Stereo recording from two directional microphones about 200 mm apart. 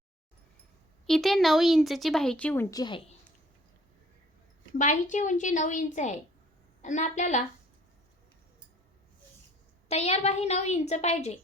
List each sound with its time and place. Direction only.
1.0 s a woman's voice: centre (ahead or behind); by 3.2 s 25° left (ahead or behind)
4.8 s a woman's voice: 40° left (ahead or behind)
9.9 s a woman's voice: 30° left (ahead or behind)